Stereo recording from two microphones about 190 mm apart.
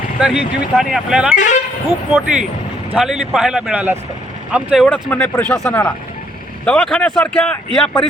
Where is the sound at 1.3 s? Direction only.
40° left (ahead or behind).